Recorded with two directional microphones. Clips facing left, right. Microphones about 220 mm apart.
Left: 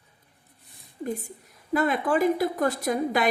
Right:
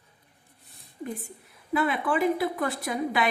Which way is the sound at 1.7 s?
40° left (ahead or behind).